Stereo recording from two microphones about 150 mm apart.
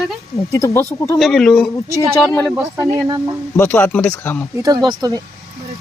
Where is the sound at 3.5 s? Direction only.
15° left (ahead or behind).